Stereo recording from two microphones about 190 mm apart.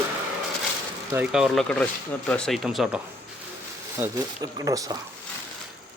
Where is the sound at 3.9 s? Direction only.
15° right (ahead or behind).